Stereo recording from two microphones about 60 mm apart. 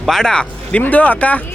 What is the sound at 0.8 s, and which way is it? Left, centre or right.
Speech, left.